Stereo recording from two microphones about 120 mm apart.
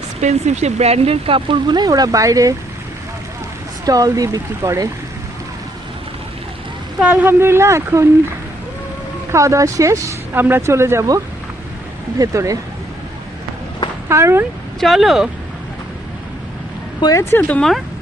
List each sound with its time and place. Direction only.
0.2 s speech: 70° right (ahead or behind); by 2.6 s 30° right (ahead or behind)
3.8 s speech: 30° right (ahead or behind)
7.0 s speech: 15° right (ahead or behind)
9.3 s speech: 25° right (ahead or behind)
12.2 s speech: 25° right (ahead or behind)
14.1 s speech: 20° right (ahead or behind)
14.8 s speech: centre (ahead or behind)
17.0 s speech: 30° left (ahead or behind)
17.3 s speech: 10° left (ahead or behind)